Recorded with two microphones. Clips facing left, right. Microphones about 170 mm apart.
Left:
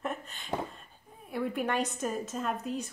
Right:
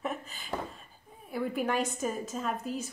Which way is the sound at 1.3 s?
Centre (ahead or behind).